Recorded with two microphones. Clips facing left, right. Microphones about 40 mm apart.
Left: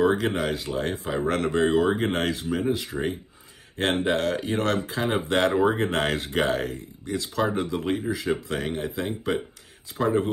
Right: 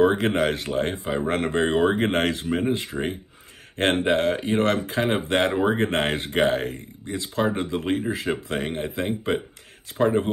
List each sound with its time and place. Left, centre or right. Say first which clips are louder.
0.0 s speech: right 3 dB; right
1.0 s speech: right 1 dB; centre; by 4.0 s right
4.0 s speech: right 3 dB; right
4.7 s speech: right 2 dB; right
5.5 s speech: even; centre
5.9 s speech: right 2 dB; right